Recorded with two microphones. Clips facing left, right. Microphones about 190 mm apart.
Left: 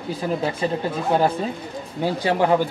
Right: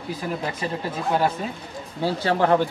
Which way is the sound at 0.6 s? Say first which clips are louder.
Left 5 dB; 30° left (ahead or behind).